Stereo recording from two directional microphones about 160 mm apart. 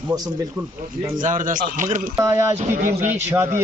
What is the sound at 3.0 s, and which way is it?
Speech, 15° right (ahead or behind).